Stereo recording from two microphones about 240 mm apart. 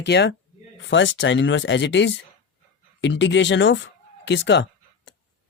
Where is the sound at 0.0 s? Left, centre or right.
Left.